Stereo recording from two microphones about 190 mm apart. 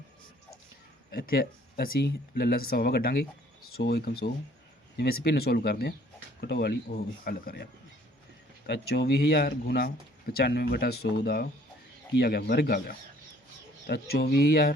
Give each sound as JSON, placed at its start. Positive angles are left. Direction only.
{"t": 1.1, "sound": "speech", "side_deg": 50}